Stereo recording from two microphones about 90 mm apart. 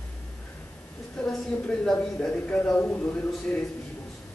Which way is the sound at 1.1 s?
15° left (ahead or behind).